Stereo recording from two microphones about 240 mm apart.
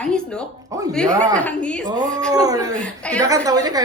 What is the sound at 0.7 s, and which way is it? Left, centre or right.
Speech, centre.